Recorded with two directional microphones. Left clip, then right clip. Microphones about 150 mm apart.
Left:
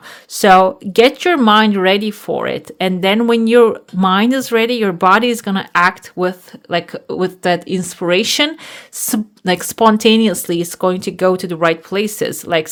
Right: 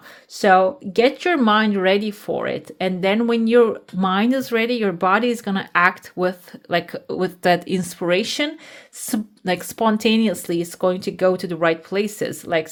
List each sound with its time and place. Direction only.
0.3 s speech: 35° left (ahead or behind)